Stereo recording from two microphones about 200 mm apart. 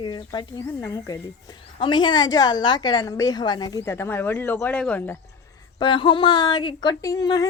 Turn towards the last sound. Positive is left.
turn(degrees=20)  # may be behind; listen again after turning